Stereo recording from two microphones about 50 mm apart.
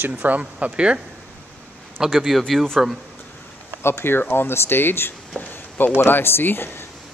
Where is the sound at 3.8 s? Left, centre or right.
Left.